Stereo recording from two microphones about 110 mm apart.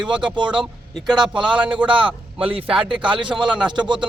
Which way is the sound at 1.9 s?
50° right (ahead or behind).